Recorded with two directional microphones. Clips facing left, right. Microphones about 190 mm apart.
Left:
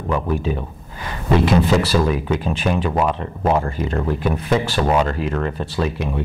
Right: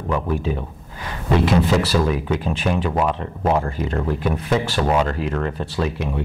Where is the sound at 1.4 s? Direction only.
10° left (ahead or behind).